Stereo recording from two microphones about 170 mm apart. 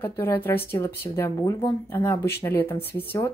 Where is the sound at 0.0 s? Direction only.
15° left (ahead or behind).